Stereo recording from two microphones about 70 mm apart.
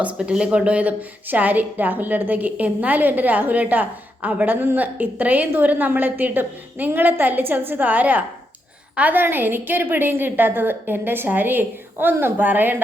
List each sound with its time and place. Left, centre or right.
0.0 s a woman's voice: centre